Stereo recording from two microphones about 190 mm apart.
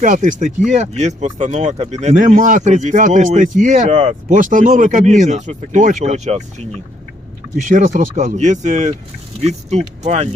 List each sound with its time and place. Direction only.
0.0 s speech: 40° right (ahead or behind)
7.6 s speech: 40° right (ahead or behind)